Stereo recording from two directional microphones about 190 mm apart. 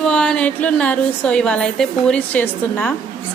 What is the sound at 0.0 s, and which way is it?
A woman's voice, 5° left (ahead or behind).